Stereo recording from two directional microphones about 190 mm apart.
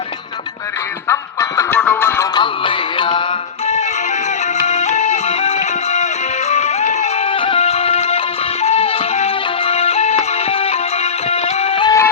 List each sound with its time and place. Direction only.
1.0 s music: 15° left (ahead or behind)
2.3 s music: 25° left (ahead or behind)
4.6 s music: 35° left (ahead or behind)
11.9 s music: 15° left (ahead or behind)